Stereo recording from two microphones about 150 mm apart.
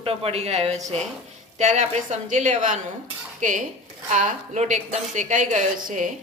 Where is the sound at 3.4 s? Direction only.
60° right (ahead or behind).